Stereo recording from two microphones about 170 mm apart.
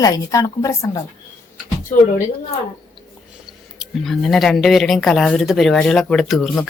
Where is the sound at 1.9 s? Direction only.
50° left (ahead or behind).